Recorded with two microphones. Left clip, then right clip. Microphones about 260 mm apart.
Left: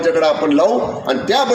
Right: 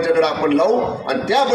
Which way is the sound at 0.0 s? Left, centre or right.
Left.